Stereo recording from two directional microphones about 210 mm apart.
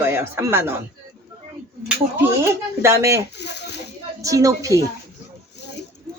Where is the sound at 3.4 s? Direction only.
55° left (ahead or behind).